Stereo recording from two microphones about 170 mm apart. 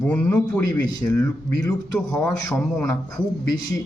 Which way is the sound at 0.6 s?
20° left (ahead or behind).